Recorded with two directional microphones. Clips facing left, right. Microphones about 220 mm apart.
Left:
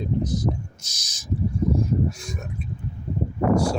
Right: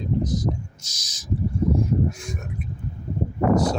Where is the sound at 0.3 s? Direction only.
55° left (ahead or behind).